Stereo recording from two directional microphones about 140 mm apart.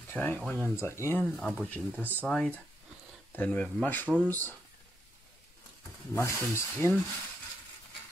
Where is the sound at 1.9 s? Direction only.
15° right (ahead or behind).